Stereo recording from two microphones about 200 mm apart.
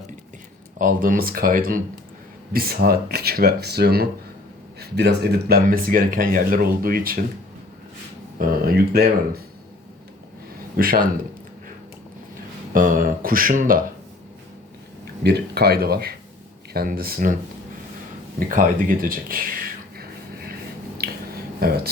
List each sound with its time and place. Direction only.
0.8 s speech: 45° right (ahead or behind)
8.4 s speech: 50° right (ahead or behind)
10.8 s speech: 45° right (ahead or behind)
12.7 s a sound: 45° right (ahead or behind)
15.2 s speech: 55° right (ahead or behind)
18.3 s speech: 45° right (ahead or behind)
21.0 s a sound: 50° right (ahead or behind)
21.6 s speech: 50° right (ahead or behind)